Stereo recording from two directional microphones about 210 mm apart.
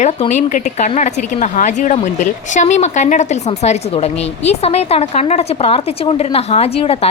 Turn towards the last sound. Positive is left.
turn(degrees=30)  # may be behind; listen again after turning